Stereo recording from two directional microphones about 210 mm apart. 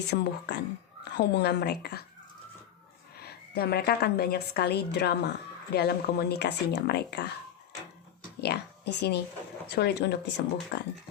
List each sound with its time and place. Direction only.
0.1 s a woman's voice: 50° left (ahead or behind)
3.2 s a woman's voice: 50° left (ahead or behind)
8.4 s a woman's voice: 50° left (ahead or behind)